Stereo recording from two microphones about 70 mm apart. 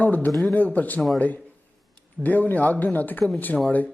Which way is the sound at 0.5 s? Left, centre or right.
Left.